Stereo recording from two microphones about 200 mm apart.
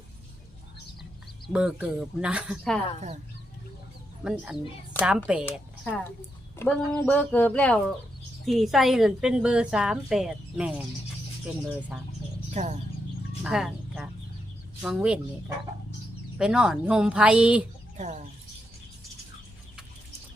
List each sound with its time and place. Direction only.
1.5 s a woman's voice: 5° right (ahead or behind)
4.2 s a woman's voice: 5° right (ahead or behind)
5.5 s a woman's voice: 10° left (ahead or behind); by 10.8 s 5° right (ahead or behind)
12.6 s speech: 35° right (ahead or behind)
13.4 s a woman's voice: 5° right (ahead or behind)
17.9 s speech: 35° right (ahead or behind)